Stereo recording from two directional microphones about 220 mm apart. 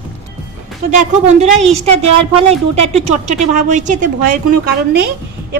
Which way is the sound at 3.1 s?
35° right (ahead or behind).